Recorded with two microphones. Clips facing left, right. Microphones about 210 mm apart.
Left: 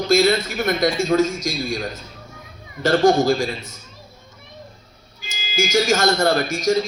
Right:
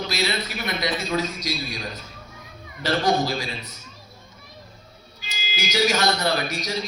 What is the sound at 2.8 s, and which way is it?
Speech, 50° left (ahead or behind).